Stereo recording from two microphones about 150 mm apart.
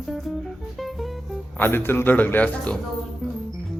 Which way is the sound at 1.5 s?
15° left (ahead or behind).